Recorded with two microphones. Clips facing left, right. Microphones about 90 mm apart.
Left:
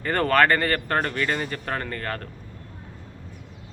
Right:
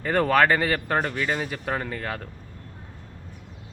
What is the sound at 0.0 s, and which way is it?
Speech, 5° right (ahead or behind).